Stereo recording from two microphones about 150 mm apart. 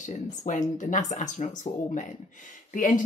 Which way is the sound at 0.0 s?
55° left (ahead or behind).